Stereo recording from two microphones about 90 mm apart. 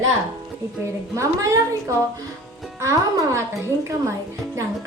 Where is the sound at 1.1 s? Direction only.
35° right (ahead or behind).